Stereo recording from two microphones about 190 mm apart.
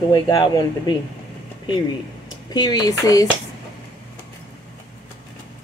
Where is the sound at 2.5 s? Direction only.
20° left (ahead or behind).